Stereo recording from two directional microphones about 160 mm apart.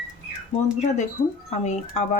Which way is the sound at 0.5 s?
45° left (ahead or behind).